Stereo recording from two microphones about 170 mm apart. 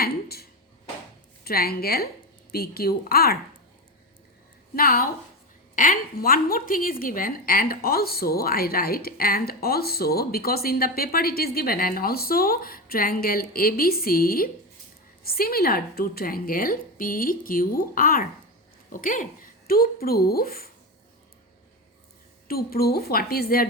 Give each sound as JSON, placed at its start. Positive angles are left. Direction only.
{"t": 0.0, "sound": "a sound", "side_deg": 65}
{"t": 1.5, "sound": "a woman's voice", "side_deg": 65}
{"t": 4.7, "sound": "a woman's voice", "side_deg": 60}
{"t": 22.4, "sound": "a woman's voice", "side_deg": 60}